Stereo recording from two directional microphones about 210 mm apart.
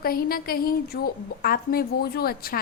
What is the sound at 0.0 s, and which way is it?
A woman's voice, 45° left (ahead or behind).